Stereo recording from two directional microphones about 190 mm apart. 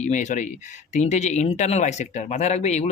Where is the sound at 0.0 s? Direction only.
40° left (ahead or behind).